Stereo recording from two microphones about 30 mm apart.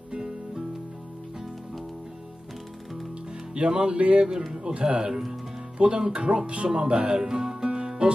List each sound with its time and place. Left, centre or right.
0.1 s music: right
3.5 s speech: right
6.7 s speech: right
7.1 s music: right